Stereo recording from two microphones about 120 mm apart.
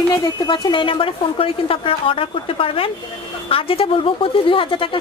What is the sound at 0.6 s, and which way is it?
Speech, 40° left (ahead or behind).